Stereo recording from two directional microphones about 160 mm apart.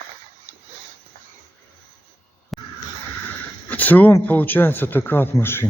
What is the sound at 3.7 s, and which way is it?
Speech, 10° left (ahead or behind).